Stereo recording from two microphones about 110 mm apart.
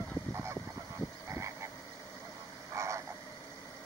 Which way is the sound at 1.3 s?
25° right (ahead or behind).